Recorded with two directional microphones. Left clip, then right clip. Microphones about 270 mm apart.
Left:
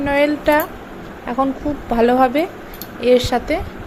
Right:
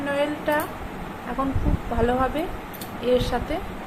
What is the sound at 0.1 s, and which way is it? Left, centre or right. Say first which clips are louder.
Speech: left 9 dB; left.